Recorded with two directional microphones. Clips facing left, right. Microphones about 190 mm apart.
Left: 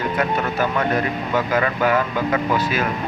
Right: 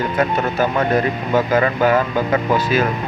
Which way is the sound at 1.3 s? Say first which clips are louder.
Right 5 dB; 35° right (ahead or behind).